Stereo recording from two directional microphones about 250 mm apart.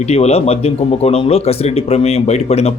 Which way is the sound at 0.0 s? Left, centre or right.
Left.